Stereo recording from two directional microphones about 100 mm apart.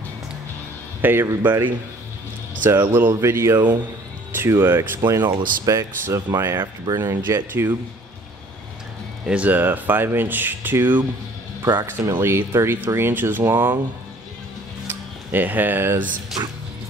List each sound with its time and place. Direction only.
1.0 s speech: 20° right (ahead or behind)
2.6 s speech: 20° right (ahead or behind)
9.2 s speech: 15° right (ahead or behind)
14.9 s speech: 20° right (ahead or behind)